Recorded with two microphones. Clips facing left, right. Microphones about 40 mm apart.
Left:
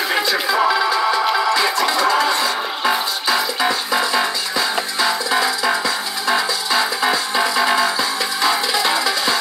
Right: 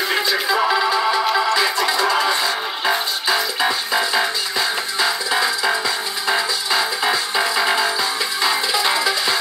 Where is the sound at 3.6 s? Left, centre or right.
Centre.